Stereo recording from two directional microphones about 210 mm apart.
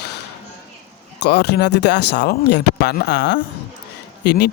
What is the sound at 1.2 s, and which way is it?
Speech, 50° left (ahead or behind).